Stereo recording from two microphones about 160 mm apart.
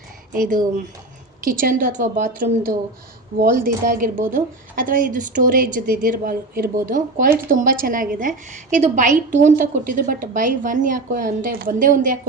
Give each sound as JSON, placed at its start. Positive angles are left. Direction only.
{"t": 0.3, "sound": "speech", "side_deg": -55}